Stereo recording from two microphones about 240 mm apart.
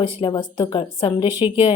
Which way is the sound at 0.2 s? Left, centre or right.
Centre.